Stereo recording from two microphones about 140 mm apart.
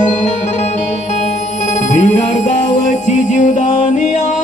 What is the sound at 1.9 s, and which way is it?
Music, 60° left (ahead or behind).